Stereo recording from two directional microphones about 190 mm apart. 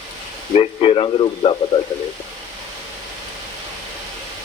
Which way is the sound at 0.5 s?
30° left (ahead or behind).